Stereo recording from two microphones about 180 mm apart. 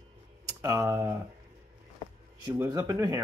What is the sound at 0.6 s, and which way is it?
Speech, 15° right (ahead or behind).